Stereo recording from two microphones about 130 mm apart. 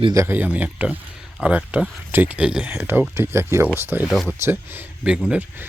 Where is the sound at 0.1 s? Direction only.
20° right (ahead or behind).